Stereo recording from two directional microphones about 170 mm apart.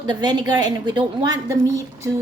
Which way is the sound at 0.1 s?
25° right (ahead or behind).